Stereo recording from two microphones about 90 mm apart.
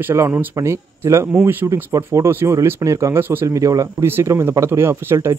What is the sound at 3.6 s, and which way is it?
Speech, 40° right (ahead or behind).